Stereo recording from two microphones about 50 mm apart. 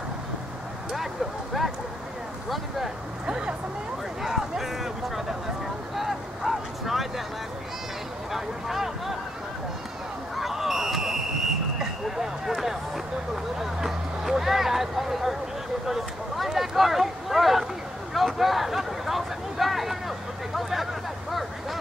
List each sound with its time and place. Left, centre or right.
1.5 s speech: centre
3.3 s speech: centre
4.2 s speech: centre
5.9 s vehicle: centre
8.3 s speech: centre
10.3 s a sound: centre
16.5 s boat: centre
18.1 s a sound: centre